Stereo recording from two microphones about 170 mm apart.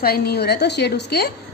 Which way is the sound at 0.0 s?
70° left (ahead or behind).